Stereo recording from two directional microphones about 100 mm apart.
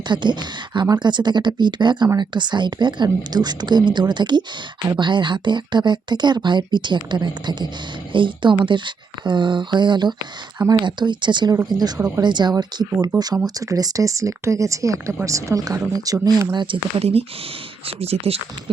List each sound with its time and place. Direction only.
0.1 s a woman's voice: 50° right (ahead or behind)
17.0 s speech: 90° right